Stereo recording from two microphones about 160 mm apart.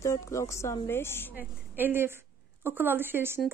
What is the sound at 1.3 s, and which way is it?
A woman's voice, 10° right (ahead or behind).